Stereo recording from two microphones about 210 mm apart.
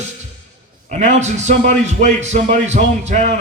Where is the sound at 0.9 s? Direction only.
35° right (ahead or behind).